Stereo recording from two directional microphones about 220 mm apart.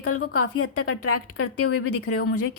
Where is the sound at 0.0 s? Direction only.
90° left.